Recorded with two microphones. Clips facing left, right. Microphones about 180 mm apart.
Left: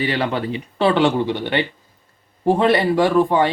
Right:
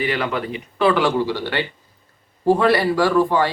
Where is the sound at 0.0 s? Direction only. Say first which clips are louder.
Left 1 dB; 30° left (ahead or behind).